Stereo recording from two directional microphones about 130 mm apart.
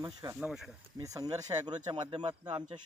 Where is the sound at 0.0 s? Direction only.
25° right (ahead or behind).